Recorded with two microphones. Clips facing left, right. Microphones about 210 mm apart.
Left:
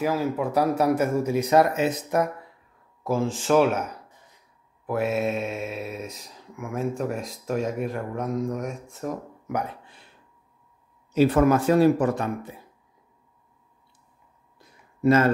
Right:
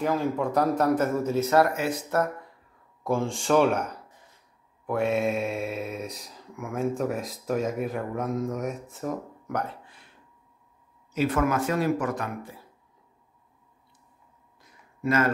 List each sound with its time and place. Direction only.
0.0 s speech: 5° left (ahead or behind)
3.0 s speech: centre (ahead or behind)
11.1 s speech: 35° left (ahead or behind)
15.0 s speech: 30° left (ahead or behind)